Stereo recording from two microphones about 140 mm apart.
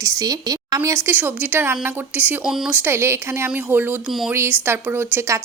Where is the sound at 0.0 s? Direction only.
25° right (ahead or behind).